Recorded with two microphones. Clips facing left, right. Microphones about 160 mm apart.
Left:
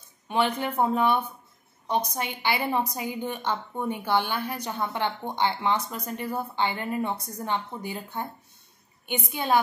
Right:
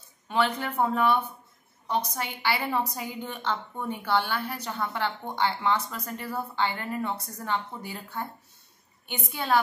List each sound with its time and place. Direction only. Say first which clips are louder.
0.3 s a woman's voice: left 1 dB; 20° left (ahead or behind)